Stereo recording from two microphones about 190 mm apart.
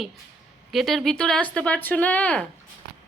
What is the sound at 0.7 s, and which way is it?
A woman's voice, centre (ahead or behind).